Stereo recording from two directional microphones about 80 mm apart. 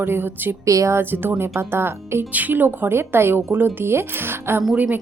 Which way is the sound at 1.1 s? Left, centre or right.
Right.